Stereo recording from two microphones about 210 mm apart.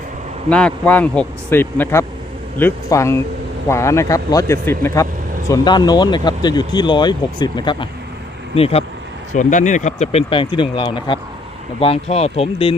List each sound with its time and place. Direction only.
0.5 s speech: 5° left (ahead or behind); by 12.7 s 25° left (ahead or behind)